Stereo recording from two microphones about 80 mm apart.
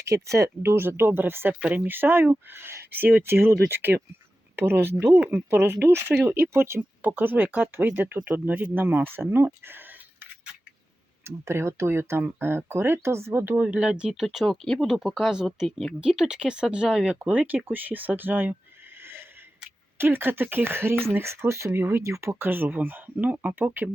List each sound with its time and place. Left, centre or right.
0.0 s speech: right
1.6 s speech: centre
11.3 s speech: right; by 14.3 s centre
14.3 s speech: centre
15.6 s speech: centre
16.0 s speech: centre; by 18.5 s right
20.0 s speech: right